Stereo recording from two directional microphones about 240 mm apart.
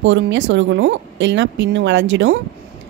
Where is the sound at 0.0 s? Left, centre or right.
Right.